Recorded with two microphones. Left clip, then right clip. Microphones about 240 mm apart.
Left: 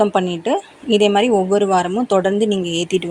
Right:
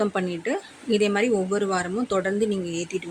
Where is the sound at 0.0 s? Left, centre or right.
Centre.